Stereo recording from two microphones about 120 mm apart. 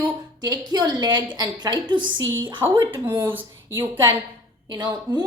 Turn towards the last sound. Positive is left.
turn(degrees=-35)  # may be behind; listen again after turning